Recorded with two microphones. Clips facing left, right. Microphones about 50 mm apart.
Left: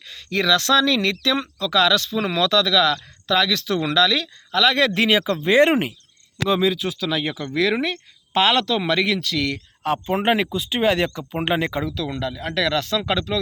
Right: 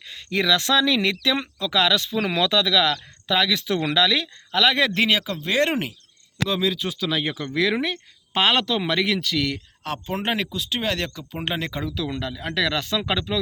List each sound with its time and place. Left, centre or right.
0.1 s speech: centre
4.9 s speech: centre
6.8 s speech: centre
10.1 s speech: centre
11.9 s speech: centre